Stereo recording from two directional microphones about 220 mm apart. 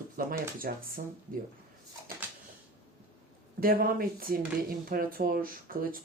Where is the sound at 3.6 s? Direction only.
40° right (ahead or behind).